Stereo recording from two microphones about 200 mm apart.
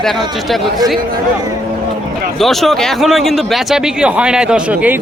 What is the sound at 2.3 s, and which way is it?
Speech, centre (ahead or behind).